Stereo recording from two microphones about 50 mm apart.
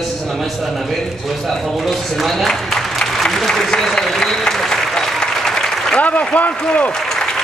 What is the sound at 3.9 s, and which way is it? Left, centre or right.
Applause, centre.